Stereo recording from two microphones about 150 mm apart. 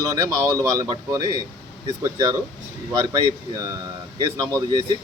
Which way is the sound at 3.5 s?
25° right (ahead or behind).